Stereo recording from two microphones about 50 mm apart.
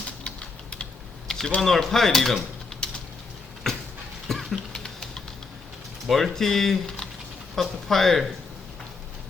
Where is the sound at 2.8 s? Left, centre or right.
Centre.